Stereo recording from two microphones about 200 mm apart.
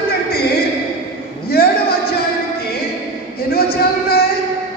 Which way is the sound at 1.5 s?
50° left (ahead or behind).